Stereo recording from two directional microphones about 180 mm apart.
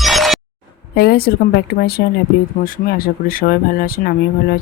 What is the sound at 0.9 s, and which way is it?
Speech, 60° left (ahead or behind).